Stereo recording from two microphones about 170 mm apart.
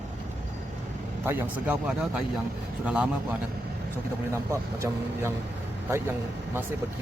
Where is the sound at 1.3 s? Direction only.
10° right (ahead or behind).